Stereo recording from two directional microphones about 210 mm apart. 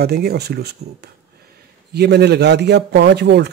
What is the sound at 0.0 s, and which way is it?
A man's voice, 50° right (ahead or behind).